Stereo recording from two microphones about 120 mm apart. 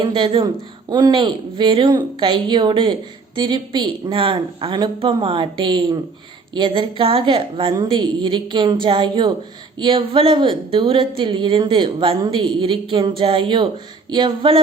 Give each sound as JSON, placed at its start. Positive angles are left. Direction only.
{"t": 0.0, "sound": "speech", "side_deg": -45}
{"t": 1.2, "sound": "speech", "side_deg": -45}